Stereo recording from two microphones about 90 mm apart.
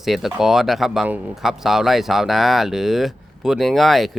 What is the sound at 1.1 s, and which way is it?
Speech, 20° right (ahead or behind).